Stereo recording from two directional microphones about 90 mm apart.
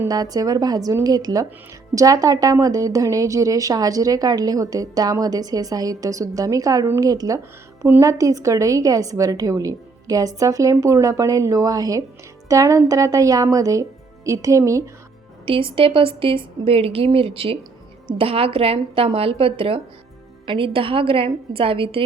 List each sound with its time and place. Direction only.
0.1 s a woman's voice: 45° right (ahead or behind)
15.4 s a woman's voice: 85° right
20.4 s a woman's voice: 70° right (ahead or behind)